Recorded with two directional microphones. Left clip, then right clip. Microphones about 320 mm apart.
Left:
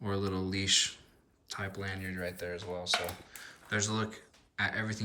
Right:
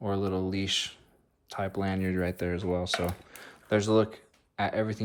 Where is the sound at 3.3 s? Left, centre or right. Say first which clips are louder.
Right 7 dB; centre.